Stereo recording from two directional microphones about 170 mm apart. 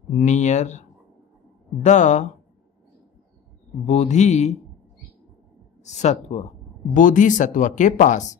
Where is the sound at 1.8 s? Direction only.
45° left (ahead or behind).